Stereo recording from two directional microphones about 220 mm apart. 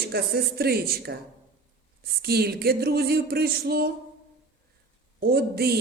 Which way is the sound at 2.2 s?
45° right (ahead or behind).